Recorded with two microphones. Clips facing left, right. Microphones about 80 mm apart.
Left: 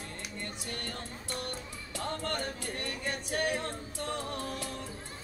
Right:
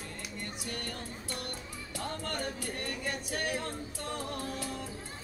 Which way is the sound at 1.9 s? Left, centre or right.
Left.